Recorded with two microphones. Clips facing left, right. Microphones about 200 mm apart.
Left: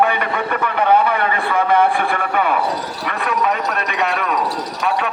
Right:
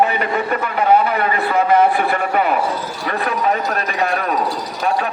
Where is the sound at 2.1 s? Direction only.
40° right (ahead or behind).